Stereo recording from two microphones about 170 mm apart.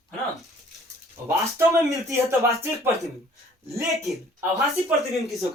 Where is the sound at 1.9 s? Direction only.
20° right (ahead or behind).